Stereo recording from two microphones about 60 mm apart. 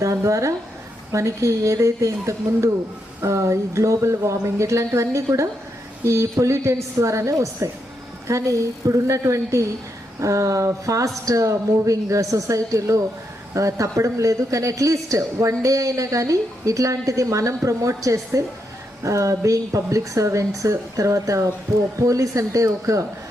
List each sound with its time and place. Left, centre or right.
0.0 s a woman's voice: right